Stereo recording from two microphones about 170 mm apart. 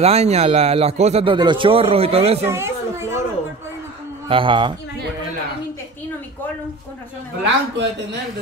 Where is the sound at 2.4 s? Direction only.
15° right (ahead or behind).